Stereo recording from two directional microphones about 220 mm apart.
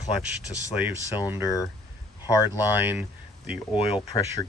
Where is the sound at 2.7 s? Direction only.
10° right (ahead or behind).